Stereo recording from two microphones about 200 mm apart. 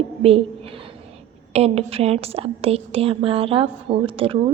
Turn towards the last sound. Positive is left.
turn(degrees=-25)  # may be behind; listen again after turning